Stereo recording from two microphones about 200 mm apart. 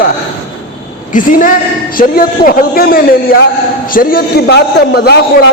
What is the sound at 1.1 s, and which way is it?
A man's voice, 40° left (ahead or behind).